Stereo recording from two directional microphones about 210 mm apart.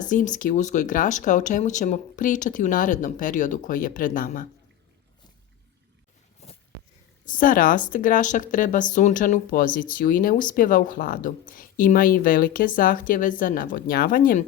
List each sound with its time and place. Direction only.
0.0 s speech: 40° left (ahead or behind)
6.4 s a sound: 30° left (ahead or behind)
7.3 s speech: 40° left (ahead or behind)